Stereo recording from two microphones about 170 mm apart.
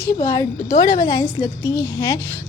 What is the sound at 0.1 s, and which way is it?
A woman's voice, 20° left (ahead or behind).